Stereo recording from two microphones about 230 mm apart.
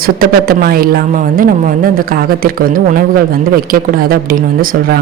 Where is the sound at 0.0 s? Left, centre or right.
Right.